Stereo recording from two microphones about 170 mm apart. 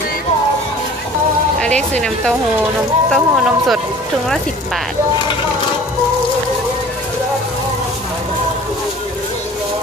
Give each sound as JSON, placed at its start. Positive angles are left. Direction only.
{"t": 1.6, "sound": "speech", "side_deg": 5}